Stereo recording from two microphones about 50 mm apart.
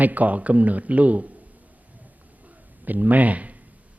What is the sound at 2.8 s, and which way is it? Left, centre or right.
Speech, right.